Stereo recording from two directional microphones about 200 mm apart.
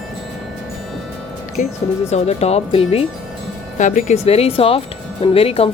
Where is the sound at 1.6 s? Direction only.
40° left (ahead or behind).